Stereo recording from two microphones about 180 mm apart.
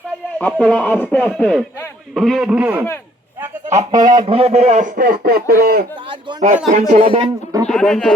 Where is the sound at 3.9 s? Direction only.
20° right (ahead or behind); by 5.8 s 55° right (ahead or behind).